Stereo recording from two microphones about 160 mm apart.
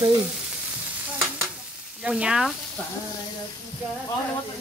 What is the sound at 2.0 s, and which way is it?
Speech, 5° right (ahead or behind).